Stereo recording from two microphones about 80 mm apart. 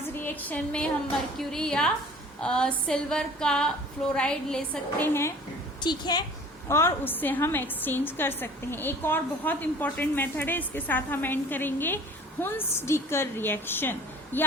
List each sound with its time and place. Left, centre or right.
0.1 s a sound: left
1.4 s a woman's voice: centre
4.9 s a woman's voice: left
5.8 s a woman's voice: left
6.7 s a woman's voice: left